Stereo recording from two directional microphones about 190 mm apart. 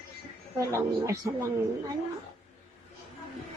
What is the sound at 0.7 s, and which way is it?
Speech, 15° right (ahead or behind).